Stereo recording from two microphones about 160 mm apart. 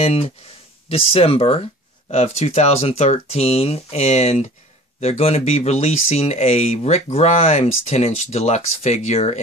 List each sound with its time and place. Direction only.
0.0 s speech: 40° left (ahead or behind)